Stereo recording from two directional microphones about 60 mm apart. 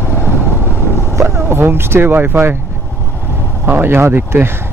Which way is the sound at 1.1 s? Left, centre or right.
Right.